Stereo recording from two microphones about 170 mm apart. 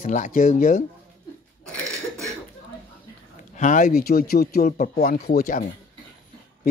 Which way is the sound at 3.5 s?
50° left (ahead or behind).